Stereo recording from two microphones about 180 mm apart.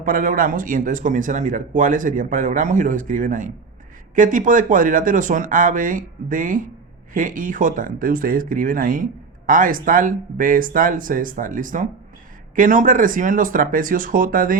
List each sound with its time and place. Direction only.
0.0 s a man's voice: 50° right (ahead or behind)